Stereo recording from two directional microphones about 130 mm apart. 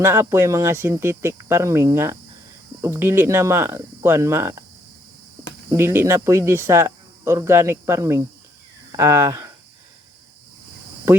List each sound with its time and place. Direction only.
0.0 s speech: 20° right (ahead or behind)
5.7 s speech: 20° right (ahead or behind)